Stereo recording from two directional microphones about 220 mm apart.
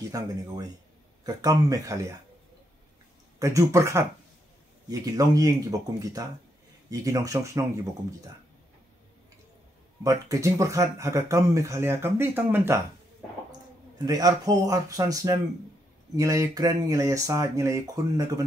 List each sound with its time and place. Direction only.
0.1 s speech: 15° right (ahead or behind)
3.3 s speech: 15° right (ahead or behind)
10.0 s speech: 15° right (ahead or behind)
14.0 s speech: 15° right (ahead or behind)